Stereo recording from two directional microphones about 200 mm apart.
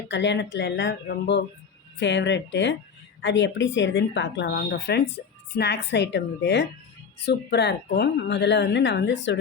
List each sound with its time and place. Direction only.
0.1 s speech: 60° left (ahead or behind)